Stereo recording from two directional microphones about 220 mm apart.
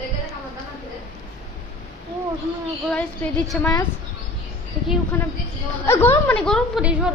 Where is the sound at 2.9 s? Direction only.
5° left (ahead or behind).